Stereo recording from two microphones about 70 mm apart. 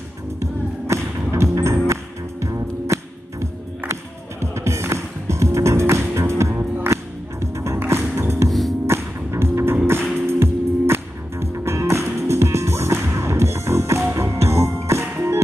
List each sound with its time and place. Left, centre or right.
0.4 s music: right
8.5 s music: centre
8.8 s music: right
15.1 s music: right